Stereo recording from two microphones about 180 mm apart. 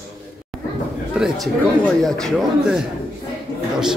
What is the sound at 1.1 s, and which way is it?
Speech, 5° right (ahead or behind).